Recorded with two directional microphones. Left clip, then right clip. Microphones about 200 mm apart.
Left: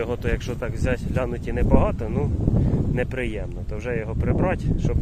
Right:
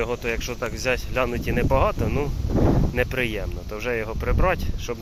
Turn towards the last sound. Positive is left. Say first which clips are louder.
# right 2 dB
turn(degrees=10)  # may be behind; listen again after turning